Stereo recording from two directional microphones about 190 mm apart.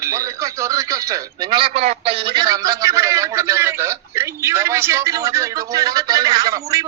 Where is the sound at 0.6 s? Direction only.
15° right (ahead or behind).